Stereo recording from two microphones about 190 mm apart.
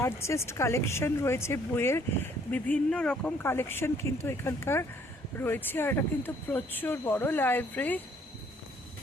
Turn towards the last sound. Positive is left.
turn(degrees=10)  # may be behind; listen again after turning